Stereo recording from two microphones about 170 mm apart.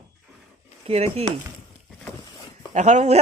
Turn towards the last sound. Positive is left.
turn(degrees=-40)  # may be behind; listen again after turning